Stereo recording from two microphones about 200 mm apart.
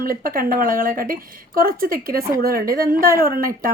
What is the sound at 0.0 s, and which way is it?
Speech, 45° right (ahead or behind).